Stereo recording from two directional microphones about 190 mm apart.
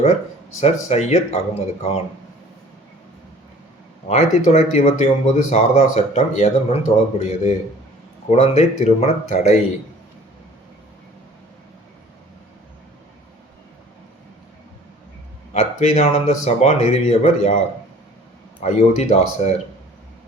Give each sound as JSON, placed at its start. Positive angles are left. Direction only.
{"t": 0.6, "sound": "speech", "side_deg": 35}
{"t": 4.1, "sound": "speech", "side_deg": 35}
{"t": 15.5, "sound": "speech", "side_deg": 35}
{"t": 18.6, "sound": "speech", "side_deg": 35}